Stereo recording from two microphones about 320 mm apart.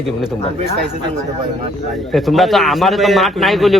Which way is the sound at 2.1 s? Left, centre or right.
Centre.